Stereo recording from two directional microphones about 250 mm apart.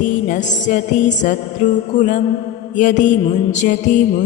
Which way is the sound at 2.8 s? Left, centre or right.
Left.